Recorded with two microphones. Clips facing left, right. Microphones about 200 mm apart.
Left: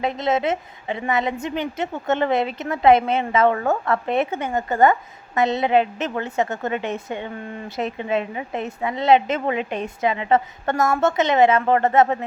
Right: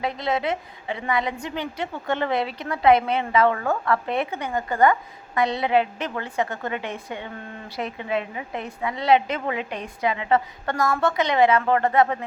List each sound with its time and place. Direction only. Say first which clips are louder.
0.0 s a woman's voice: left 4 dB; 20° left (ahead or behind)